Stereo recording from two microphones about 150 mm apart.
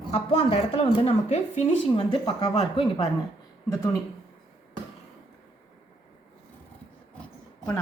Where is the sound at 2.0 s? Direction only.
30° left (ahead or behind).